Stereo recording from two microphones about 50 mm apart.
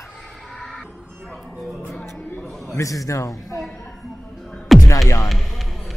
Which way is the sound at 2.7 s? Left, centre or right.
Left.